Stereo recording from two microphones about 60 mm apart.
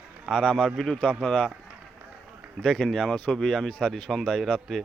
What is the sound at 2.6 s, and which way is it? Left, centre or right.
Speech, centre.